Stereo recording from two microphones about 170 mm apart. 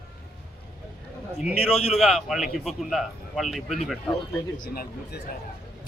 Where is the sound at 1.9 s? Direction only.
Centre (ahead or behind).